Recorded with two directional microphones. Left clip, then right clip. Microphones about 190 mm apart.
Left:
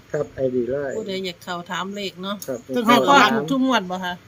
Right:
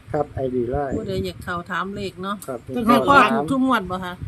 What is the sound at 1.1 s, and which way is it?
Speech, centre (ahead or behind).